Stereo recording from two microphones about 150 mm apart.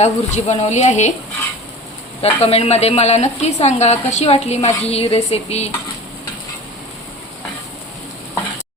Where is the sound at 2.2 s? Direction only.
40° left (ahead or behind).